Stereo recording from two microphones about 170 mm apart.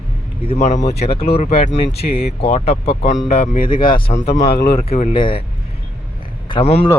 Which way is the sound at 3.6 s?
30° left (ahead or behind).